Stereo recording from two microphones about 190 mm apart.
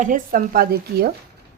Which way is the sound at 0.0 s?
45° right (ahead or behind).